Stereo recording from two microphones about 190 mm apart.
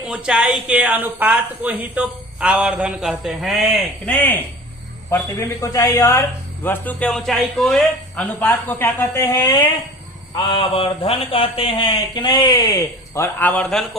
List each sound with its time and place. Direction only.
0.0 s a woman's voice: 5° right (ahead or behind)